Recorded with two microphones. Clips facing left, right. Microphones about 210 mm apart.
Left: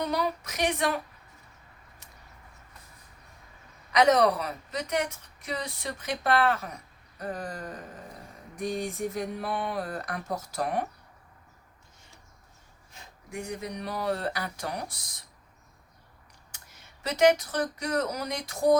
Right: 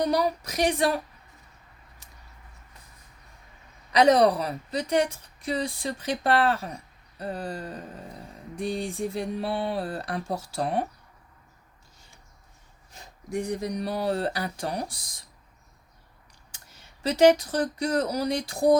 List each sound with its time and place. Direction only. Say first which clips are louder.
0.0 s a sound: right 5 dB; 35° right (ahead or behind)
3.9 s a woman's voice: right 3 dB; 30° right (ahead or behind)
13.3 s a woman's voice: right 6 dB; 35° right (ahead or behind)
16.5 s speech: right 2 dB; 30° right (ahead or behind)